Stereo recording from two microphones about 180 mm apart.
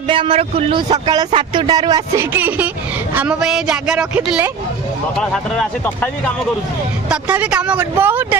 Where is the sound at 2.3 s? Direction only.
10° right (ahead or behind).